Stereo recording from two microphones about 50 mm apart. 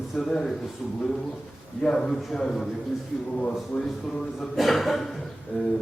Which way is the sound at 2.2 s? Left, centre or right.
Centre.